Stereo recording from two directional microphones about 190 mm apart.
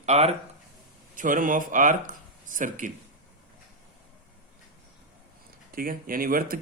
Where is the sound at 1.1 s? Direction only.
45° right (ahead or behind).